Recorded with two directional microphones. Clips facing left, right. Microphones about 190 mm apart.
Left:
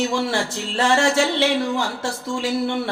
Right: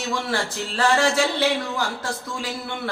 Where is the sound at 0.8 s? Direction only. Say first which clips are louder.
Left 2 dB; 25° left (ahead or behind).